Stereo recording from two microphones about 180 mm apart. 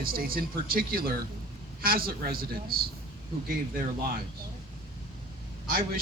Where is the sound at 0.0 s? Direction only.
55° right (ahead or behind).